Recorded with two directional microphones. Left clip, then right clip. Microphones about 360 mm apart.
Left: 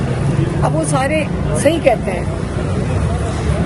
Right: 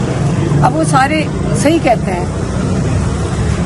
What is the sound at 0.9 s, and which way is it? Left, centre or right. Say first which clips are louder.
Speech: right 5 dB; centre.